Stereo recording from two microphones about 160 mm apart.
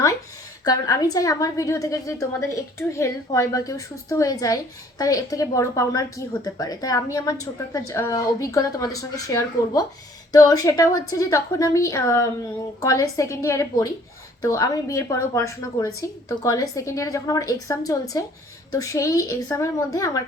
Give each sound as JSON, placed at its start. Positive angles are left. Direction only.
{"t": 0.6, "sound": "a woman's voice", "side_deg": 20}